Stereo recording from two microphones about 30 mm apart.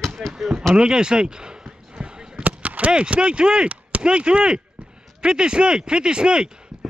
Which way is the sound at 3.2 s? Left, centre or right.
Right.